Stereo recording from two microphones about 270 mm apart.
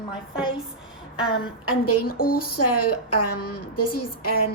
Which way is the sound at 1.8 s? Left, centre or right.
Left.